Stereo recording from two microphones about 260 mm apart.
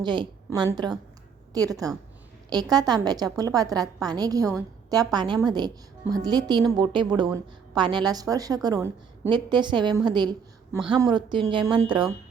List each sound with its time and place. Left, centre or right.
0.0 s a woman's voice: centre